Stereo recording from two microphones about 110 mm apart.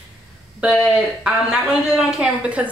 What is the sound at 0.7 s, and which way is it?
A woman's voice, 5° right (ahead or behind).